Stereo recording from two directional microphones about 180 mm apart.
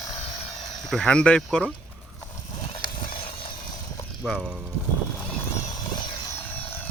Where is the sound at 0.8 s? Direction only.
Centre (ahead or behind).